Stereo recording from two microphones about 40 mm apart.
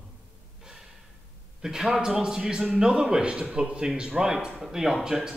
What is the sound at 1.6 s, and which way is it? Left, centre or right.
A man's voice, centre.